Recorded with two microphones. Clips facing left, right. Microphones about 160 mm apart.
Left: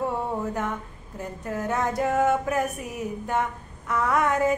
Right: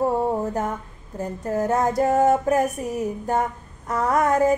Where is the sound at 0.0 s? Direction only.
40° right (ahead or behind).